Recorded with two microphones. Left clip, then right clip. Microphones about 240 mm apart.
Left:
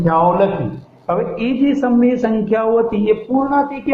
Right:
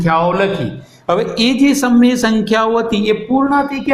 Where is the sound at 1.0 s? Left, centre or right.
Right.